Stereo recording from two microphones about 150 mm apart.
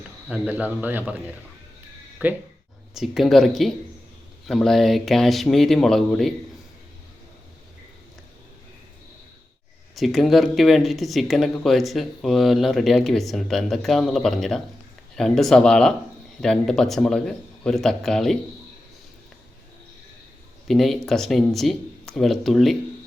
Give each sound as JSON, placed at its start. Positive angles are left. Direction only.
{"t": 0.3, "sound": "speech", "side_deg": -10}
{"t": 2.2, "sound": "speech", "side_deg": -10}
{"t": 2.9, "sound": "speech", "side_deg": 0}
{"t": 9.9, "sound": "speech", "side_deg": 0}
{"t": 20.7, "sound": "speech", "side_deg": 0}